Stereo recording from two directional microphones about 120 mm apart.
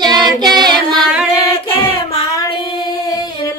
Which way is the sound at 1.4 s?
25° left (ahead or behind).